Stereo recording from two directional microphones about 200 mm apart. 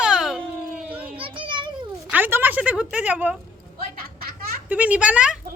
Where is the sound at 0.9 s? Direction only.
5° right (ahead or behind).